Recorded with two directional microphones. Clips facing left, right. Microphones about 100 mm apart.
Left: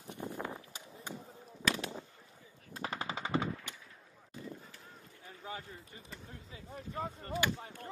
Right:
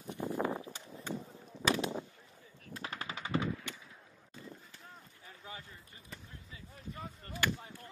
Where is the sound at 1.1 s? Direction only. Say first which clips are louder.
Right 5 dB; 15° left (ahead or behind).